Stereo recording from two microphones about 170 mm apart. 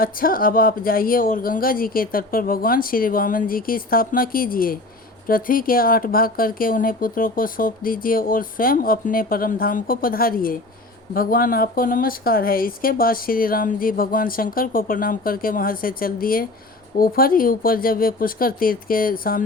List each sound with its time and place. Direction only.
0.0 s speech: 55° left (ahead or behind)